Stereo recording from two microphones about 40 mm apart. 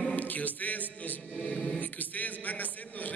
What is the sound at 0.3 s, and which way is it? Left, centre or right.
Music, left.